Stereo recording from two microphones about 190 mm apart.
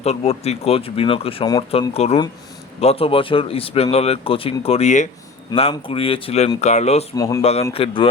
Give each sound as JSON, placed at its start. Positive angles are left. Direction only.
{"t": 0.0, "sound": "speech", "side_deg": 35}
{"t": 1.9, "sound": "speech", "side_deg": 35}
{"t": 7.2, "sound": "speech", "side_deg": 20}
{"t": 7.7, "sound": "speech", "side_deg": 30}